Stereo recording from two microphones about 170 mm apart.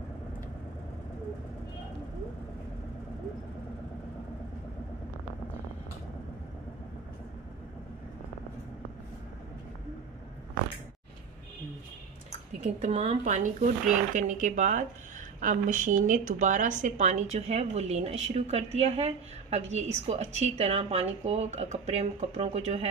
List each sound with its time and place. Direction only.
12.6 s a woman's voice: 40° right (ahead or behind)